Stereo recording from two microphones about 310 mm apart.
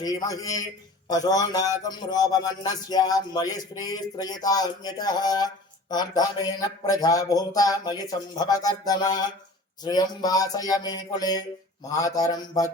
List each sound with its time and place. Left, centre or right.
0.0 s speech: centre